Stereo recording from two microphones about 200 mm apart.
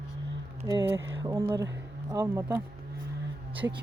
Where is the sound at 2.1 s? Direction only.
15° right (ahead or behind).